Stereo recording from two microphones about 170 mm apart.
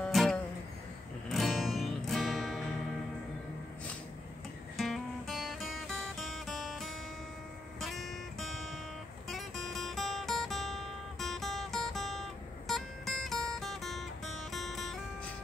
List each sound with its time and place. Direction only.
0.0 s music: centre (ahead or behind)
4.7 s music: centre (ahead or behind)
9.3 s guitar: centre (ahead or behind)